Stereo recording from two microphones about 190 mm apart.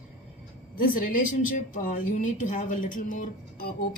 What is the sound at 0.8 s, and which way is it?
Speech, 50° left (ahead or behind).